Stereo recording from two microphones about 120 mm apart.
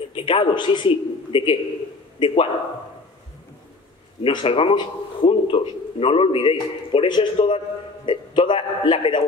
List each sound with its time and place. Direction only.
0.1 s a man's voice: 45° left (ahead or behind)
4.2 s a man's voice: 45° left (ahead or behind)